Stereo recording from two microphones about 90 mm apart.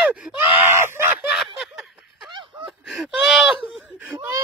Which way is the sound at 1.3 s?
5° right (ahead or behind).